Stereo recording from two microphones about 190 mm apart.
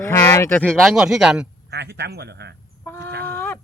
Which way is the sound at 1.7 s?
60° right (ahead or behind).